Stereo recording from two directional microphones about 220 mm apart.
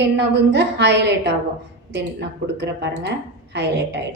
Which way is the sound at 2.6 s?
50° right (ahead or behind).